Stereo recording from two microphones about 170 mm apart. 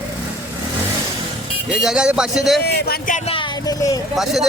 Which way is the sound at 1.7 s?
5° right (ahead or behind).